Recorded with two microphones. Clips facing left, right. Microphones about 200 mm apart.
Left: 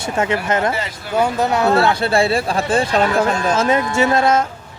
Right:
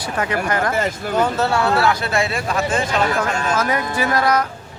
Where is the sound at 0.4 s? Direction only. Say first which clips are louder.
Even; 25° left (ahead or behind).